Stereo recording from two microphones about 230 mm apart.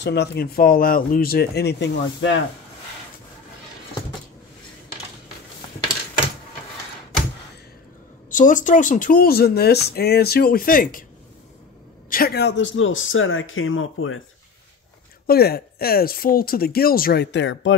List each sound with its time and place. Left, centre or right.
0.0 s speech: left
8.3 s speech: left
12.1 s speech: left
15.2 s speech: left